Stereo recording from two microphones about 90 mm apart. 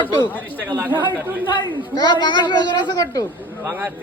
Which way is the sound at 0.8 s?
20° right (ahead or behind).